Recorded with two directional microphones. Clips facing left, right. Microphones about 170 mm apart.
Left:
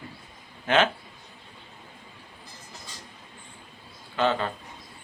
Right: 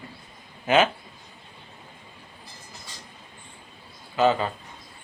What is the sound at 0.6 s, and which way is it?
Speech, 5° right (ahead or behind).